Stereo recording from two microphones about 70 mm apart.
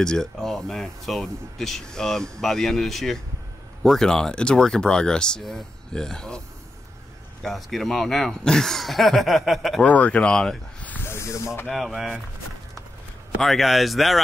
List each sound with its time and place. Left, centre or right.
0.0 s speech: centre
7.4 s speech: centre
9.8 s speech: centre
11.1 s speech: left
11.7 s speech: centre
13.4 s speech: centre